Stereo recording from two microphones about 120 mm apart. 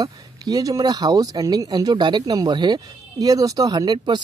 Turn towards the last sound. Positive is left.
turn(degrees=-35)  # may be behind; listen again after turning